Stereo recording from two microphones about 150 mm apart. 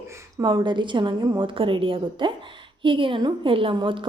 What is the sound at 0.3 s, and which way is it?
A woman's voice, 25° right (ahead or behind).